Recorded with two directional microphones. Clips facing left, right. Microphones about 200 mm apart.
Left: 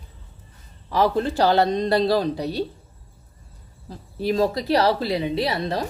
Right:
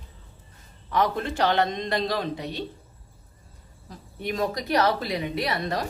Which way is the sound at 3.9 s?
30° left (ahead or behind).